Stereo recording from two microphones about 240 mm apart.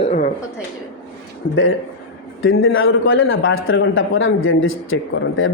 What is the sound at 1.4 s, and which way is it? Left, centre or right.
A man's voice, left.